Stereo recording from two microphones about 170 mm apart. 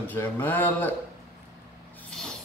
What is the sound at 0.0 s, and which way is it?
Speech, 10° left (ahead or behind).